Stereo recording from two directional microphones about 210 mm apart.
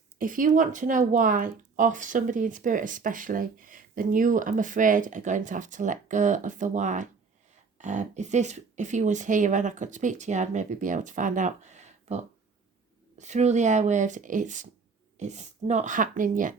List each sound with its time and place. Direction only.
0.2 s speech: 40° right (ahead or behind)